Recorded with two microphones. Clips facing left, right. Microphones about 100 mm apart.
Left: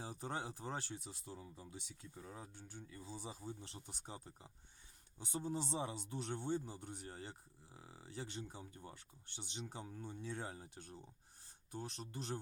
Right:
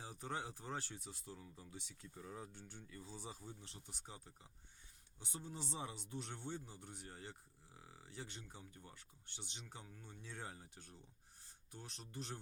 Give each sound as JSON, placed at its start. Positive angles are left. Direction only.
{"t": 0.0, "sound": "speech", "side_deg": 30}
{"t": 2.9, "sound": "speech", "side_deg": 20}